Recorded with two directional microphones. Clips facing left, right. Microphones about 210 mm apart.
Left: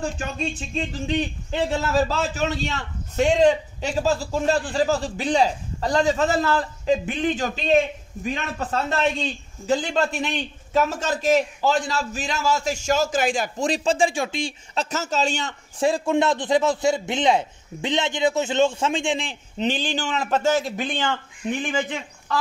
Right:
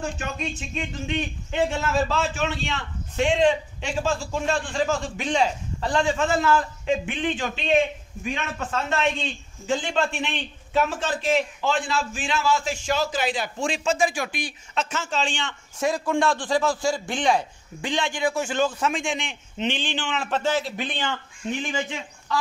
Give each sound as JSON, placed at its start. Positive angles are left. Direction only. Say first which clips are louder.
{"t": 0.4, "sound": "a man's voice", "louder": "left 3 dB", "side_deg": 35}